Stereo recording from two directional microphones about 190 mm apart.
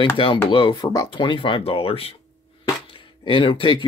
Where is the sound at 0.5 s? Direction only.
25° left (ahead or behind).